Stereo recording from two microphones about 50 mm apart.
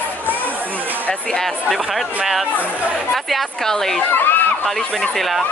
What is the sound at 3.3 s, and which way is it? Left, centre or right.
Speech, centre.